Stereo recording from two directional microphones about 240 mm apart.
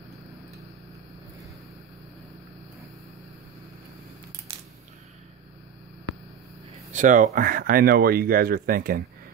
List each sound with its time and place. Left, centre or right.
6.9 s speech: right